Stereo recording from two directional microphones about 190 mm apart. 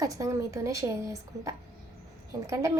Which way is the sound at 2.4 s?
15° right (ahead or behind).